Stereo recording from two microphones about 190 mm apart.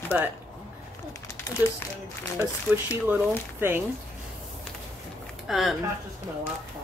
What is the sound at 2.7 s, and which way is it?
Speech, 10° right (ahead or behind).